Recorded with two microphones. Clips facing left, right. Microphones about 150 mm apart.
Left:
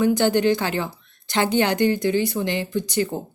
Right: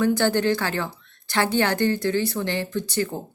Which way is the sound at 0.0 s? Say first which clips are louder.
Left 2 dB; 15° left (ahead or behind).